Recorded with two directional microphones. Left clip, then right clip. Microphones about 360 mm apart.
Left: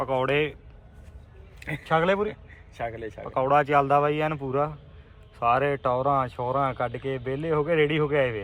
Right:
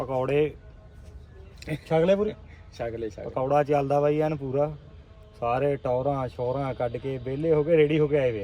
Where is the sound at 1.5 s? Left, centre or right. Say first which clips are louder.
Left 1 dB; centre.